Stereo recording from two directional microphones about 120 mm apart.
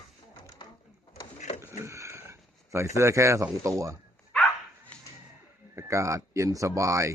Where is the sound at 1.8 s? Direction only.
25° right (ahead or behind).